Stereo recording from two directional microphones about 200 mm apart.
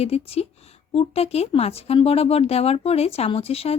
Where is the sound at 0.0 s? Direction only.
30° left (ahead or behind).